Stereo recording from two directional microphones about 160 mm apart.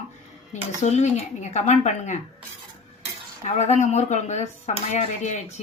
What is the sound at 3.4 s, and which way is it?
Speech, 45° left (ahead or behind).